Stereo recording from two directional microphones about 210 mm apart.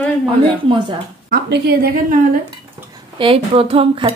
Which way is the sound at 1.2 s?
45° right (ahead or behind).